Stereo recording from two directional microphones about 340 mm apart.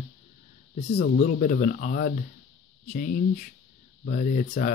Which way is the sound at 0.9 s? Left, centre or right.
Left.